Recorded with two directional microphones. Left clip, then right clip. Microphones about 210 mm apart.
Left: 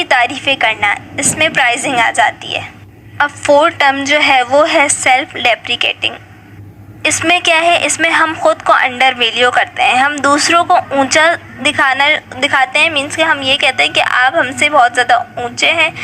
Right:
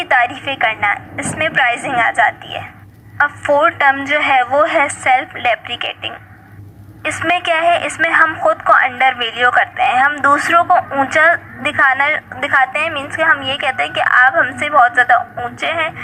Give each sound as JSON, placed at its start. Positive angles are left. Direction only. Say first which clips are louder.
{"t": 0.1, "sound": "a woman's voice", "louder": "left 1 dB", "side_deg": 40}